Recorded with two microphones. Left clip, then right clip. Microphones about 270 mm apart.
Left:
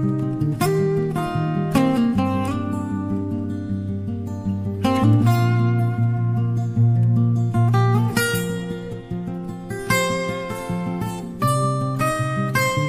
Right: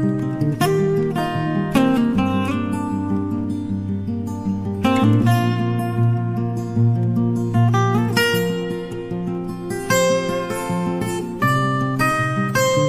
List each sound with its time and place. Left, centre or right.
0.6 s music: left
4.8 s music: left
7.5 s music: left
9.8 s music: left
11.4 s music: left